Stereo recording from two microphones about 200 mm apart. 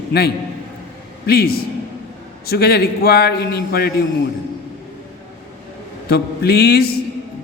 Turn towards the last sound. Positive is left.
turn(degrees=50)  # may be behind; listen again after turning